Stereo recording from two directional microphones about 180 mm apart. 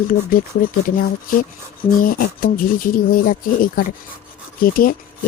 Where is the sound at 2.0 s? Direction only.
50° left (ahead or behind).